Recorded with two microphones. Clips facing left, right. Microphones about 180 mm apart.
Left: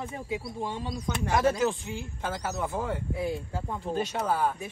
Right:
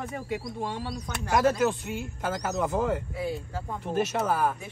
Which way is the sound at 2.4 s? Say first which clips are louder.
Right 4 dB; 20° right (ahead or behind).